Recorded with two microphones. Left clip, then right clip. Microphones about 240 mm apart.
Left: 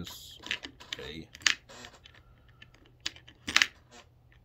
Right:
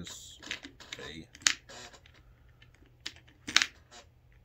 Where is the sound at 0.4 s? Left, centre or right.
Left.